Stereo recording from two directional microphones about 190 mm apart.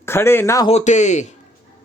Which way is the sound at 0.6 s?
35° left (ahead or behind).